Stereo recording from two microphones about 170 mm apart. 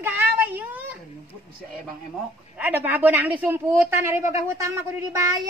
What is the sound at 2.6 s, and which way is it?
Speech, 10° right (ahead or behind).